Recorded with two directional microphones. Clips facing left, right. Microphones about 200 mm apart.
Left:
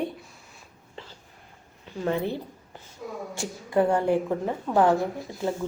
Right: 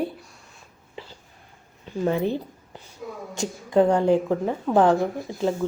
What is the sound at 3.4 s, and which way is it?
Speech, 20° right (ahead or behind).